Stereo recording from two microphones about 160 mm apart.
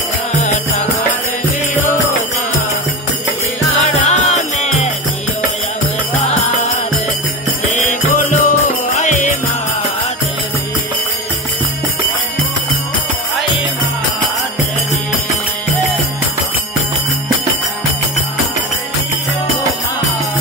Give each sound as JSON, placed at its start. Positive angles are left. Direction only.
{"t": 0.4, "sound": "music", "side_deg": 45}
{"t": 4.0, "sound": "music", "side_deg": 45}
{"t": 6.1, "sound": "music", "side_deg": 45}